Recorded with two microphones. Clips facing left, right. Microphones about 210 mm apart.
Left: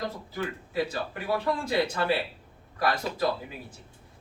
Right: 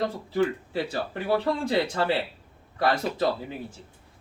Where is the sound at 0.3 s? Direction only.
30° right (ahead or behind).